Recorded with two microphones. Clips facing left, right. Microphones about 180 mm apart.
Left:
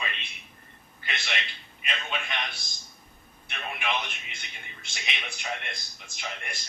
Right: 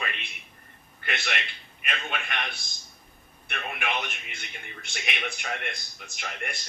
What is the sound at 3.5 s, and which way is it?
A man's voice, 55° right (ahead or behind).